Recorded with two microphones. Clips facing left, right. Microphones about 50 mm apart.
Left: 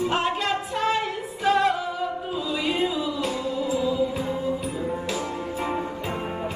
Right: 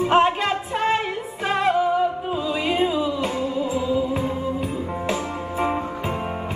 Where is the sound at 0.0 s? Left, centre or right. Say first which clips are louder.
Right 6 dB; right.